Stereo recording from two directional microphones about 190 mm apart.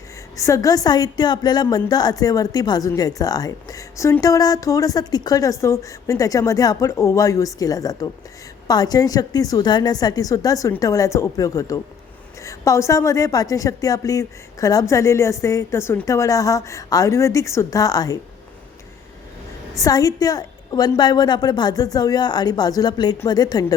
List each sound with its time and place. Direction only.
0.3 s a woman's voice: 15° left (ahead or behind)
19.8 s a woman's voice: 20° left (ahead or behind)